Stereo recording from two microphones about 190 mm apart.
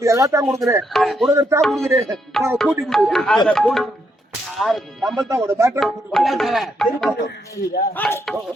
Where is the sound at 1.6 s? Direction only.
Centre (ahead or behind).